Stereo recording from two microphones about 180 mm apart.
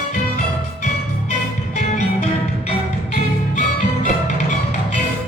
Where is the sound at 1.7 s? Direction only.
40° left (ahead or behind).